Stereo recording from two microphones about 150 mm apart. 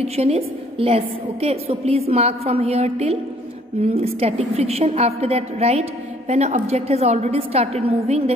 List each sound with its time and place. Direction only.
0.0 s a woman's voice: 40° right (ahead or behind)